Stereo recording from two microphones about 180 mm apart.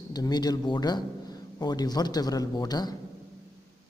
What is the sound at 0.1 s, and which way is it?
A man's voice, 20° left (ahead or behind).